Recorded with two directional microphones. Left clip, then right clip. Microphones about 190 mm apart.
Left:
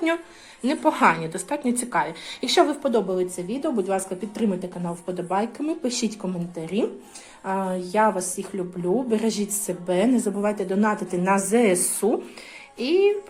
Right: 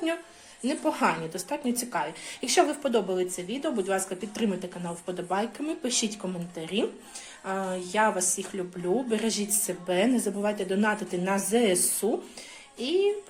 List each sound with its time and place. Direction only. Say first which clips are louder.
0.6 s a woman's voice: left 7 dB; 10° right (ahead or behind)
11.5 s a woman's voice: left 4 dB; 15° right (ahead or behind)
12.8 s a woman's voice: left 6 dB; centre (ahead or behind)